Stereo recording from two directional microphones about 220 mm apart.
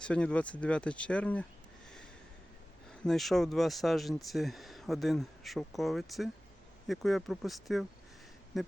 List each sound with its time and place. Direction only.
0.0 s speech: 5° left (ahead or behind)
2.9 s speech: centre (ahead or behind)